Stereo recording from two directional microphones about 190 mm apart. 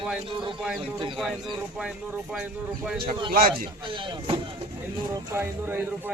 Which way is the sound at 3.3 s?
50° right (ahead or behind).